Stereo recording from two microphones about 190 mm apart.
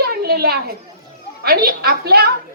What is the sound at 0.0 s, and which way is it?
Children playing, 55° right (ahead or behind).